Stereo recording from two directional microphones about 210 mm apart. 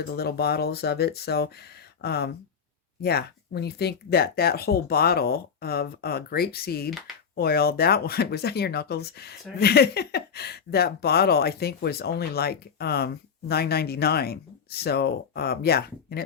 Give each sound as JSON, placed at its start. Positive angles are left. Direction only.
{"t": 0.1, "sound": "speech", "side_deg": 50}